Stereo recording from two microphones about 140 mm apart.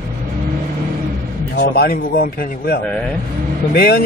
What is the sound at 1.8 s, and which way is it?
Speech, 90° left.